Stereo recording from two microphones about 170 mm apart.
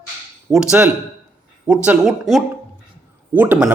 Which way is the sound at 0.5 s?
5° right (ahead or behind).